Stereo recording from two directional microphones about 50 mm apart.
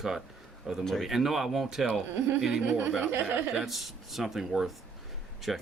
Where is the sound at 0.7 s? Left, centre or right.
Centre.